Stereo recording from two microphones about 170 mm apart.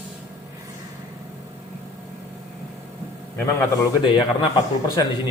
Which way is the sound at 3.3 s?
15° left (ahead or behind).